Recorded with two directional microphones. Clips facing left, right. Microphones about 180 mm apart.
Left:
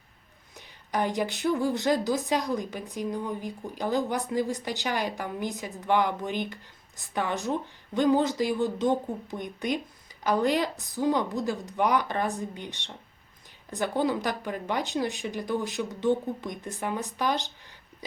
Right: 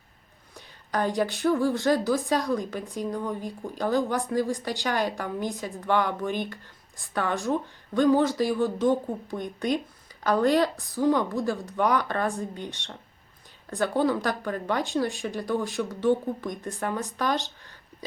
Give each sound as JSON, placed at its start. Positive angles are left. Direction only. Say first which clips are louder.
{"t": 0.5, "sound": "a woman's voice", "louder": "right 1 dB", "side_deg": 15}